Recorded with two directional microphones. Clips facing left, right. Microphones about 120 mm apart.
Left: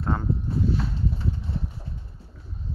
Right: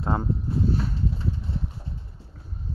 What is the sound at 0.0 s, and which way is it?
Speech, 25° right (ahead or behind).